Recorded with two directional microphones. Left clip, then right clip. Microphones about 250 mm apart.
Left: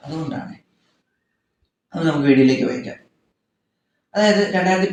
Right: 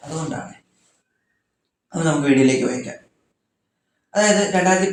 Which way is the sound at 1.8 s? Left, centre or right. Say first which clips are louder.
Left 1 dB; right.